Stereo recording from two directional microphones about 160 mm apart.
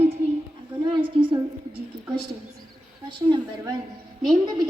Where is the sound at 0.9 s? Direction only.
35° right (ahead or behind).